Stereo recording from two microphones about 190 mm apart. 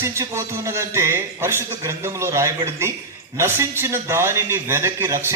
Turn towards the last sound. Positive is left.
turn(degrees=-15)  # may be behind; listen again after turning